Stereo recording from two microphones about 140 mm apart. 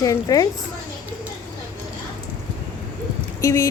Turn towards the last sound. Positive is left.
turn(degrees=20)  # may be behind; listen again after turning